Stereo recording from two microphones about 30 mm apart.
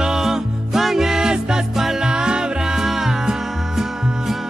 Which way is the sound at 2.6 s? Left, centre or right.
Centre.